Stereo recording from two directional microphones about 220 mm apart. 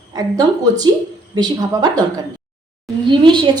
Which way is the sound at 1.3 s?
20° right (ahead or behind).